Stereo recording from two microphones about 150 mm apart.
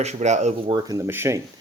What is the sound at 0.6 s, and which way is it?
Speech, 25° right (ahead or behind).